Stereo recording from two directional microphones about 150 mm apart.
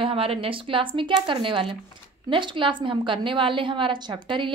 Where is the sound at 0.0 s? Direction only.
40° right (ahead or behind).